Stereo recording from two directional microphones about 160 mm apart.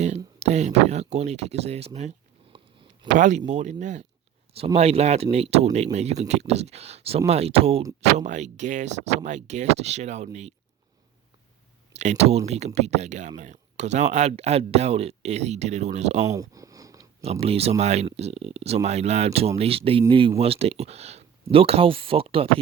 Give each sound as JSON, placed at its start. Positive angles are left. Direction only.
{"t": 0.3, "sound": "speech", "side_deg": -45}
{"t": 11.9, "sound": "speech", "side_deg": -45}
{"t": 16.3, "sound": "a sound", "side_deg": -20}
{"t": 17.4, "sound": "speech", "side_deg": -40}